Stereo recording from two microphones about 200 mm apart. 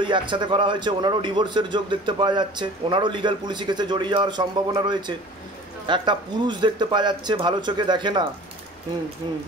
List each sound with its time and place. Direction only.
0.0 s a man's voice: 25° right (ahead or behind)